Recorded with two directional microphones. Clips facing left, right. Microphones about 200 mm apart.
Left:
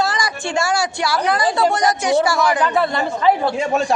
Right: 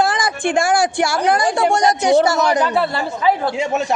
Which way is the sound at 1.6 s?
25° right (ahead or behind).